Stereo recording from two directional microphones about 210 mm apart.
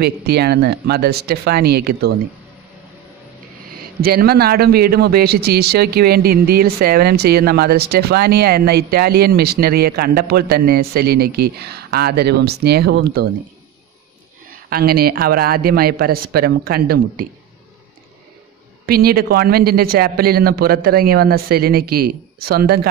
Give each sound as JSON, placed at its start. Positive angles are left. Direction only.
{"t": 0.0, "sound": "a man's voice", "side_deg": -50}
{"t": 3.7, "sound": "a man's voice", "side_deg": -45}
{"t": 14.7, "sound": "a man's voice", "side_deg": -45}
{"t": 18.9, "sound": "a man's voice", "side_deg": -45}